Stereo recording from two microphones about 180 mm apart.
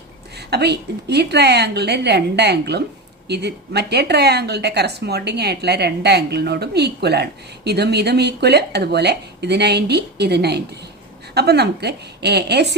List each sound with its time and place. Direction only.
0.3 s speech: 65° right (ahead or behind)